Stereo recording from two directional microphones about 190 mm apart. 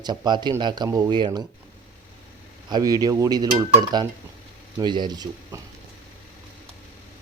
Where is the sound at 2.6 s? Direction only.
20° right (ahead or behind).